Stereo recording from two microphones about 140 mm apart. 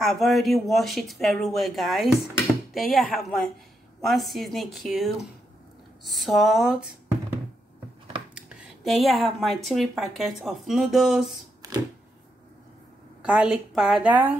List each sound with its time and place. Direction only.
0.0 s speech: centre (ahead or behind)
8.4 s speech: 5° right (ahead or behind)
11.6 s a sound: 25° right (ahead or behind)
13.2 s a woman's voice: 10° right (ahead or behind)